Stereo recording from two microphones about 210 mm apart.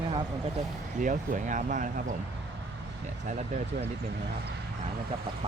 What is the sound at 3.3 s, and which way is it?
Speech, 35° right (ahead or behind).